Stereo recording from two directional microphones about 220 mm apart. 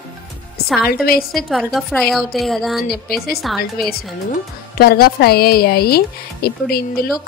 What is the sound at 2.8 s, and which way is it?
Speech, 45° left (ahead or behind).